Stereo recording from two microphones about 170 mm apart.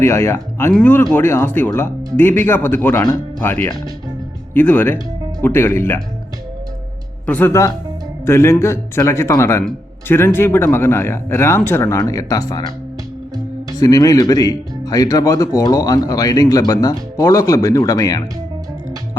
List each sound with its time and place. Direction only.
0.0 s speech: 15° left (ahead or behind)
7.3 s speech: 10° left (ahead or behind)
13.7 s speech: 20° left (ahead or behind)